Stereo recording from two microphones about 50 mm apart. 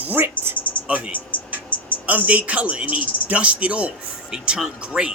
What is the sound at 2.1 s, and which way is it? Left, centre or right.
A man's voice, right.